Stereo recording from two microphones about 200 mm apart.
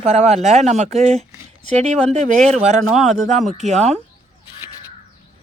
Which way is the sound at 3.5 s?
35° right (ahead or behind).